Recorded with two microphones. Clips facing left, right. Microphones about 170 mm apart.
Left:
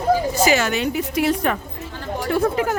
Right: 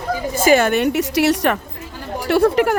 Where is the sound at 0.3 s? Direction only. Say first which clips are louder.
Right 4 dB; 50° right (ahead or behind).